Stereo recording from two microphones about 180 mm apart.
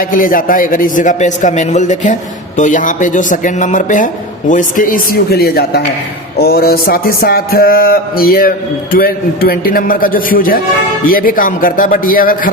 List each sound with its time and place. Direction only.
0.0 s speech: 50° left (ahead or behind)
6.4 s mantra: 60° left (ahead or behind)
11.0 s speech: 50° left (ahead or behind)